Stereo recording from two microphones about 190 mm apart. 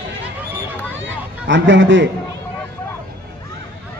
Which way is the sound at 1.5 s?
75° right (ahead or behind).